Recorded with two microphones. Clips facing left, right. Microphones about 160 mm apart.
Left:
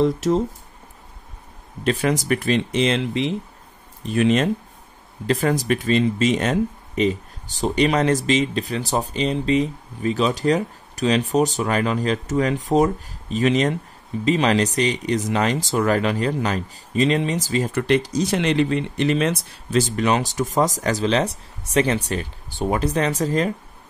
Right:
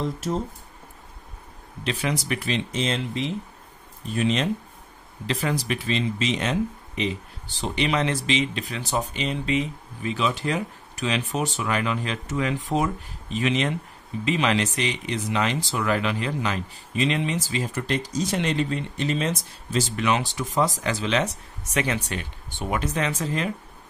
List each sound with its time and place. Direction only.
1.9 s speech: 50° left (ahead or behind)
2.7 s speech: 75° left (ahead or behind)
5.2 s speech: 45° left (ahead or behind)
17.7 s speech: 70° left (ahead or behind)
20.0 s speech: 40° left (ahead or behind)